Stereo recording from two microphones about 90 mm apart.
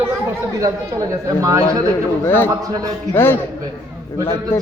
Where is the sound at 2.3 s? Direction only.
25° left (ahead or behind).